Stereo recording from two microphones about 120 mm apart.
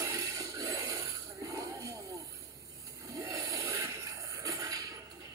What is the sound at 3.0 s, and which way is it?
Snoring, 30° right (ahead or behind).